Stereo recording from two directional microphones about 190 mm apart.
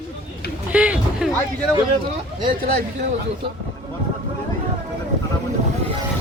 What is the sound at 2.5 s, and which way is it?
Speech, 50° right (ahead or behind).